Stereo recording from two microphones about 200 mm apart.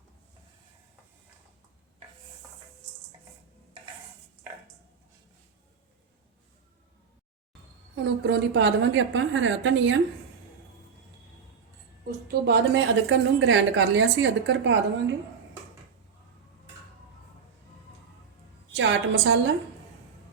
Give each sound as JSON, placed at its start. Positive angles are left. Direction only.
{"t": 8.0, "sound": "a woman's voice", "side_deg": -60}
{"t": 12.0, "sound": "a woman's voice", "side_deg": -45}
{"t": 12.7, "sound": "a woman's voice", "side_deg": -65}
{"t": 18.8, "sound": "a woman's voice", "side_deg": -65}